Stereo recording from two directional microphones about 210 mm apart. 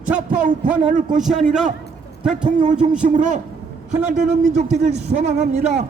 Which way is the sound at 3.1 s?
35° right (ahead or behind).